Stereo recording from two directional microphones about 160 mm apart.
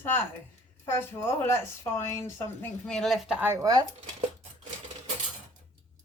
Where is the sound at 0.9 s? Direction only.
15° left (ahead or behind); by 3.9 s 20° right (ahead or behind).